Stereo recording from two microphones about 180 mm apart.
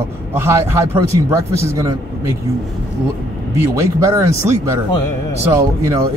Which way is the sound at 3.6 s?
15° right (ahead or behind).